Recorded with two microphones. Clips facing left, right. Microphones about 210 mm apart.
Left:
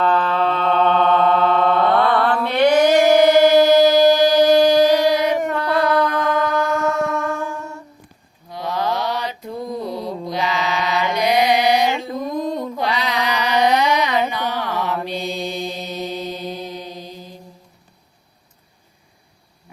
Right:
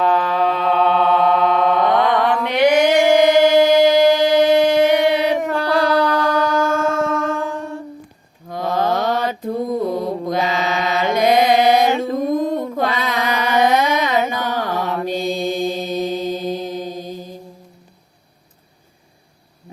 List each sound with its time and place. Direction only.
0.0 s mantra: 10° right (ahead or behind)
3.2 s music: 20° right (ahead or behind)
5.5 s mantra: 90° right
6.6 s a sound: 30° right (ahead or behind)
8.4 s mantra: 50° right (ahead or behind)
12.7 s carnatic music: 50° right (ahead or behind)
15.5 s mantra: 50° right (ahead or behind)